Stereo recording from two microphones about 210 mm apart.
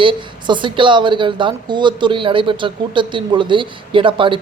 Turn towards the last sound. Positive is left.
turn(degrees=-25)  # may be behind; listen again after turning